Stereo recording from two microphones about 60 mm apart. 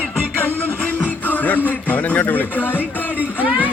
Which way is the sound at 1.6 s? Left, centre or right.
Left.